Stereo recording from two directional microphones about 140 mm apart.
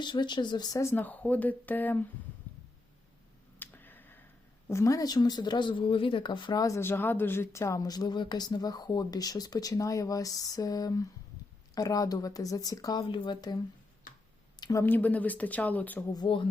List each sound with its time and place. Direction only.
0.0 s speech: 30° left (ahead or behind); by 2.0 s 15° left (ahead or behind)
2.5 s a sound: 15° left (ahead or behind)
4.7 s speech: 25° left (ahead or behind)
14.6 s a sound: 25° left (ahead or behind)
14.8 s speech: 10° left (ahead or behind)
16.1 s speech: 35° left (ahead or behind)